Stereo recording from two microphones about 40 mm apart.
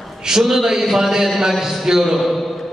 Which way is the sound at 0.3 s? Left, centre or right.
Centre.